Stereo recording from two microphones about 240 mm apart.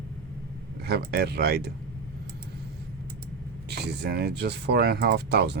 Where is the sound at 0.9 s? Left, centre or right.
Right.